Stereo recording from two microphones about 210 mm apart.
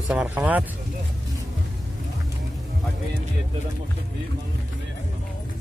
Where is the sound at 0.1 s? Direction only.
5° right (ahead or behind).